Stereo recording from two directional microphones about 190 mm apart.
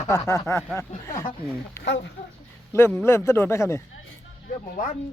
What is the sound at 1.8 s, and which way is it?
Speech, 60° left (ahead or behind).